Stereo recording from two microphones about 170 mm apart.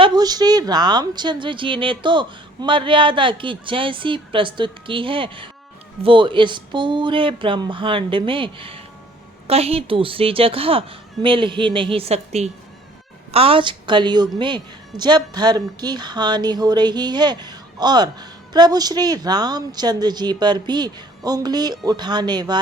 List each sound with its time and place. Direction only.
0.0 s a woman's voice: 25° right (ahead or behind)